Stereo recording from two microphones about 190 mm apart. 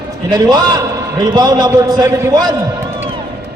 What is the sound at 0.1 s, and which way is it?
A man's voice, 20° right (ahead or behind).